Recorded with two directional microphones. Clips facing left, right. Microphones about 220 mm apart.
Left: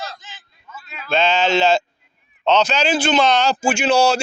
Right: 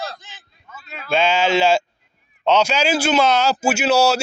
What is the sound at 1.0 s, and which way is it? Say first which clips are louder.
A man's voice: even; 10° right (ahead or behind).